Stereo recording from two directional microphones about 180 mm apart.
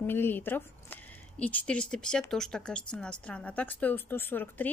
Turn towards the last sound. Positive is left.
turn(degrees=10)  # may be behind; listen again after turning